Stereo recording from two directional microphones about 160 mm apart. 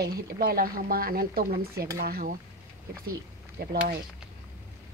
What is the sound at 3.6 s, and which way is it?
Speech, 75° right (ahead or behind).